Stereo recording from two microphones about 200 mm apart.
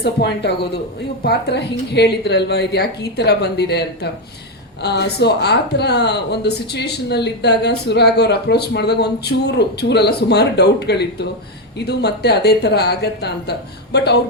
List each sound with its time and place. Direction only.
0.0 s speech: 60° left (ahead or behind)